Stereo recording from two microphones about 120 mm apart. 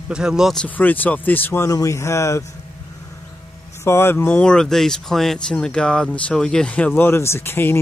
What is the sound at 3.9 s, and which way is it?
Speech, 20° left (ahead or behind).